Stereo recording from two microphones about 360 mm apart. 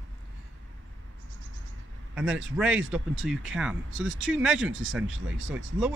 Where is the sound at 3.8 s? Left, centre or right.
Right.